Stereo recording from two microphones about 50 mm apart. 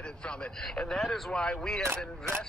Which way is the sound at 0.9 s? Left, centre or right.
Centre.